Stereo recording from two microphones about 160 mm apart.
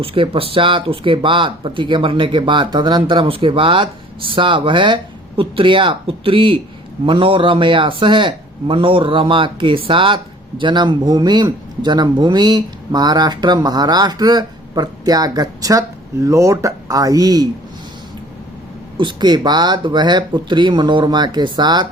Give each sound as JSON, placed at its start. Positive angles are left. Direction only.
{"t": 0.0, "sound": "a man's voice", "side_deg": -35}
{"t": 18.9, "sound": "a man's voice", "side_deg": -30}